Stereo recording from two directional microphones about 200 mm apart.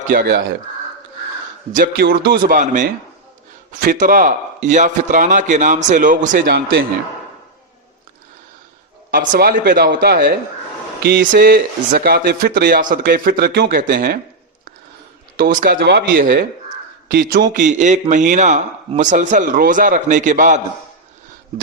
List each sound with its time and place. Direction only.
0.1 s speech: 50° right (ahead or behind)
1.7 s a man's voice: 45° right (ahead or behind)
9.0 s speech: 45° right (ahead or behind)
15.4 s a man's voice: 45° right (ahead or behind)